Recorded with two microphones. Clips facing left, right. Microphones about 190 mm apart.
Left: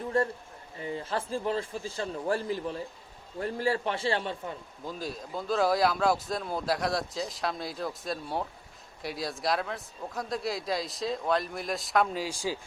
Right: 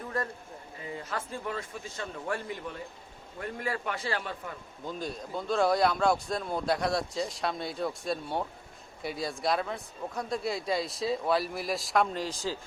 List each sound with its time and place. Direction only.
0.1 s a sound: 30° left (ahead or behind)
0.8 s a man's voice: 30° left (ahead or behind)
4.9 s speech: centre (ahead or behind)